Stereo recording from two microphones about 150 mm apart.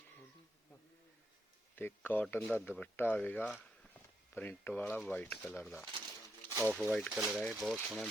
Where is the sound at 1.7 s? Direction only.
15° left (ahead or behind).